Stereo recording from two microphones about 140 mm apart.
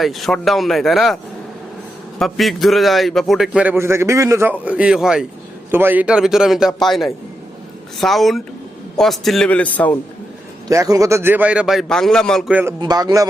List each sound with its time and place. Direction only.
0.0 s a man's voice: centre (ahead or behind)
10.7 s a man's voice: 25° right (ahead or behind); by 12.5 s 5° left (ahead or behind)
12.5 s a man's voice: 10° right (ahead or behind)
12.8 s a man's voice: 30° right (ahead or behind)